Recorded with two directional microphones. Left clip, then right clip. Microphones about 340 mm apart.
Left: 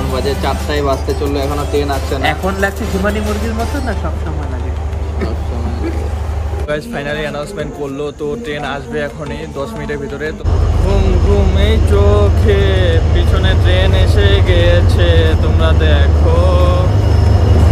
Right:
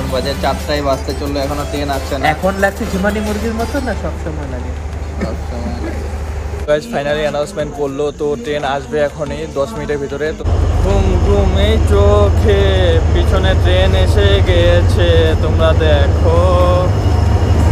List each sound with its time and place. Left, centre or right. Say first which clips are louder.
0.1 s speech: right 1 dB; centre
6.7 s speech: right 5 dB; centre
11.5 s speech: right 1 dB; centre